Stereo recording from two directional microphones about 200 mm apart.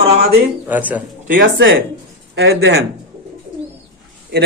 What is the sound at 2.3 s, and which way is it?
Speech, 60° right (ahead or behind).